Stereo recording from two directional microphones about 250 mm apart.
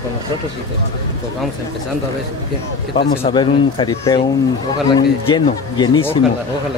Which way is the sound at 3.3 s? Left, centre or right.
Centre.